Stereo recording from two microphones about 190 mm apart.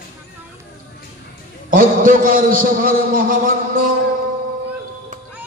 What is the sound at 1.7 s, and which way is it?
A man's voice, 45° right (ahead or behind).